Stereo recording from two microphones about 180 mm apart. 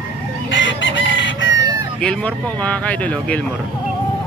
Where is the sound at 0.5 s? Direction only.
90° left.